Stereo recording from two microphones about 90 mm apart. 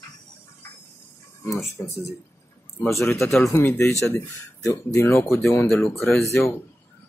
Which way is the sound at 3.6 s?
25° left (ahead or behind).